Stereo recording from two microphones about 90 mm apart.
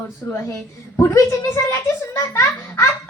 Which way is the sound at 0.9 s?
30° left (ahead or behind).